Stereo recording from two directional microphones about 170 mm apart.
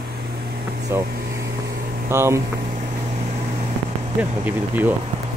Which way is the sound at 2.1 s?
15° right (ahead or behind).